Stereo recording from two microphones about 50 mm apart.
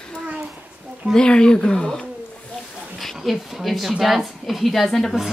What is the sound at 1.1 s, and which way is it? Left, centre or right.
Speech, centre.